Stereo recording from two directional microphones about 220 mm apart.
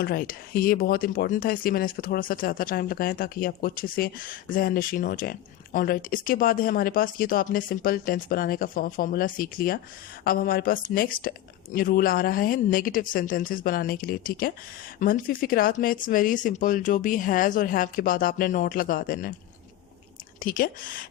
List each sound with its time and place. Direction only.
0.0 s speech: 40° left (ahead or behind)
20.4 s speech: 40° left (ahead or behind)